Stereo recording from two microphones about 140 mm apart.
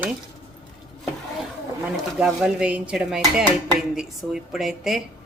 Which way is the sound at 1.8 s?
10° right (ahead or behind).